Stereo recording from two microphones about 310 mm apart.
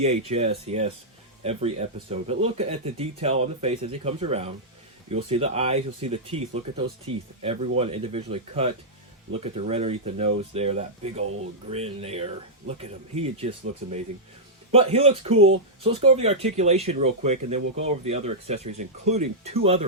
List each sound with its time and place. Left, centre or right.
0.0 s speech: centre
14.7 s speech: centre